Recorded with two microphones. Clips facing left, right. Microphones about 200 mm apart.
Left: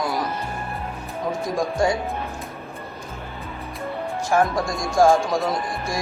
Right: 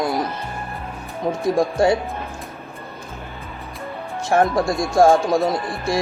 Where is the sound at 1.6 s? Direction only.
30° right (ahead or behind).